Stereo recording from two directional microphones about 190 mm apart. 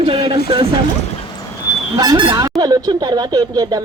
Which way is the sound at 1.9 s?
20° right (ahead or behind).